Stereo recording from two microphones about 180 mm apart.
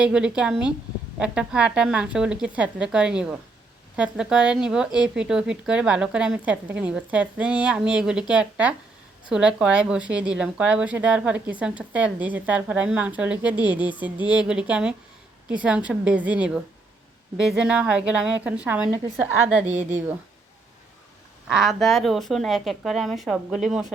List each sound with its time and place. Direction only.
0.0 s a woman's voice: 5° right (ahead or behind)
21.4 s speech: 5° right (ahead or behind)